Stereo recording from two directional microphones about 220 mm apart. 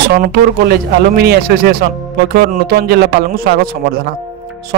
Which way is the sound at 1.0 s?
45° right (ahead or behind).